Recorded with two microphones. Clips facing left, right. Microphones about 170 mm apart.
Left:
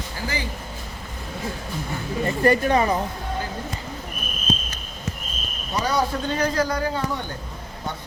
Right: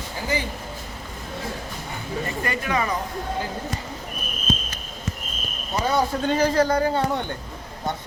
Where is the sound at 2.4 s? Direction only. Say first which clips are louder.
Left 9 dB; 35° left (ahead or behind).